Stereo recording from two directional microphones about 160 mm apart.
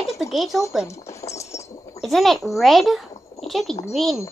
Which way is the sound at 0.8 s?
20° left (ahead or behind).